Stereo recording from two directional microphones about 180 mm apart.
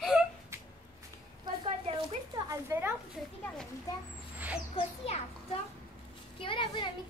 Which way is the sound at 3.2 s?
Centre (ahead or behind).